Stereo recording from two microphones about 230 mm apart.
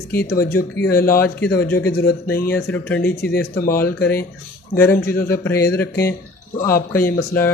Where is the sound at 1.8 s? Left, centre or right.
Left.